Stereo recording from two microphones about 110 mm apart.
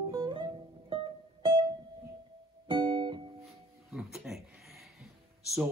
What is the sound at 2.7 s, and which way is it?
Music, 50° right (ahead or behind).